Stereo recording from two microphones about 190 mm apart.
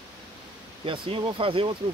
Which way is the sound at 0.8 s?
25° right (ahead or behind).